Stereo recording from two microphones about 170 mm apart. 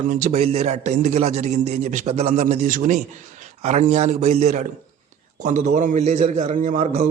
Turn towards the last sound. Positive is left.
turn(degrees=-50)  # may be behind; listen again after turning